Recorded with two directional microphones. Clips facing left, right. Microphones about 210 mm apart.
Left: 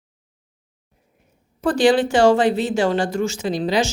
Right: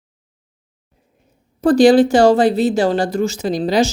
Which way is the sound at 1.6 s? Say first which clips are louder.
Right 6 dB; 40° right (ahead or behind).